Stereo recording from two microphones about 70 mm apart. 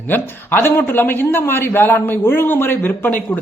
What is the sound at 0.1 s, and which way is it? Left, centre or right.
A man's voice, left.